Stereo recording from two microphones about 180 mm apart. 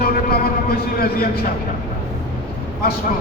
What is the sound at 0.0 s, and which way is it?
Vehicle, 60° left (ahead or behind).